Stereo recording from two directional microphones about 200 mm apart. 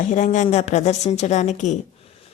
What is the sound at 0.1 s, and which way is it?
A woman's voice, 40° left (ahead or behind).